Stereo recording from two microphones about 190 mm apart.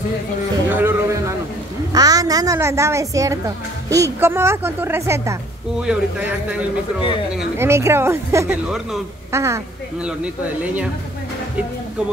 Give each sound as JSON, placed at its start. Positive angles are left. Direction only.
{"t": 0.7, "sound": "a sound", "side_deg": -10}
{"t": 1.9, "sound": "a woman's voice", "side_deg": -20}
{"t": 5.8, "sound": "speech", "side_deg": -5}
{"t": 7.5, "sound": "speech", "side_deg": -15}
{"t": 8.6, "sound": "speech", "side_deg": 0}
{"t": 9.3, "sound": "speech", "side_deg": -15}